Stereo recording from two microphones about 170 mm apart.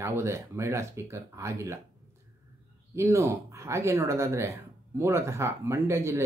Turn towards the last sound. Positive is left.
turn(degrees=-15)  # may be behind; listen again after turning